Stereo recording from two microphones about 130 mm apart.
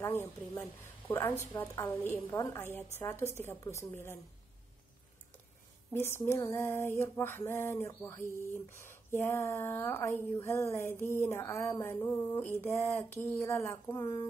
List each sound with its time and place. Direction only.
0.0 s a woman's voice: 15° left (ahead or behind)
5.9 s speech: 15° left (ahead or behind)